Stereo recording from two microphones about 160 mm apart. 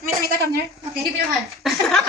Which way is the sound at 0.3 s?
85° right.